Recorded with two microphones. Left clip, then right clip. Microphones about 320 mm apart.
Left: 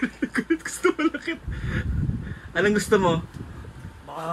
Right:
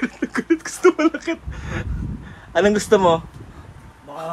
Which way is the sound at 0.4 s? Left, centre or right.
Right.